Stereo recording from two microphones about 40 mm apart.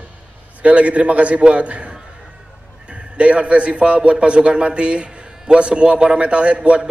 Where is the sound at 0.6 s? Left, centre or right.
Right.